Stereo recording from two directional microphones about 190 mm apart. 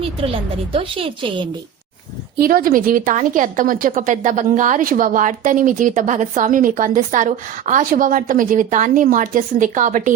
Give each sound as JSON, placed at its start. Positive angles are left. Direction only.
{"t": 0.7, "sound": "a woman's voice", "side_deg": -30}
{"t": 2.4, "sound": "a woman's voice", "side_deg": -50}